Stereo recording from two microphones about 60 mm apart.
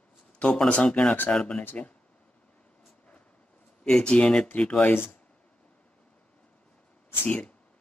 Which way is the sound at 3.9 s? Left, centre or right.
Centre.